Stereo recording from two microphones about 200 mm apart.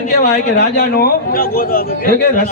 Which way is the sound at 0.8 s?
50° left (ahead or behind).